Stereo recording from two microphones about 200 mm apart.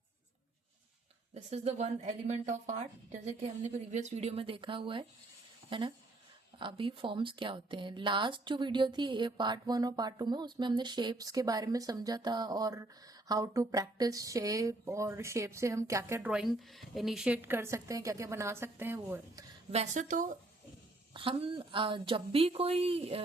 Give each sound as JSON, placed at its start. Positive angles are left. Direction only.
{"t": 1.3, "sound": "speech", "side_deg": -35}
{"t": 19.7, "sound": "speech", "side_deg": -35}
{"t": 21.1, "sound": "speech", "side_deg": -25}